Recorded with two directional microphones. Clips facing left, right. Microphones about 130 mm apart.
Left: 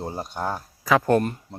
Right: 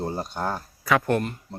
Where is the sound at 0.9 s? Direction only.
30° left (ahead or behind).